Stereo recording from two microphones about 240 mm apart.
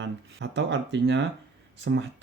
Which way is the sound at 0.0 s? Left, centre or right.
Right.